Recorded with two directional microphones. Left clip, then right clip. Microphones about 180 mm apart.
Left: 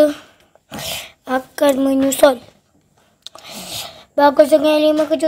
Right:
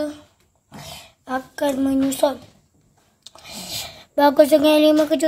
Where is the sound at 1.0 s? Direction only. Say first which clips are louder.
Left 4 dB; 25° left (ahead or behind).